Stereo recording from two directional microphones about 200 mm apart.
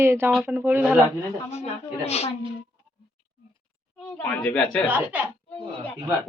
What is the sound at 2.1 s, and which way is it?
Speech, 30° left (ahead or behind).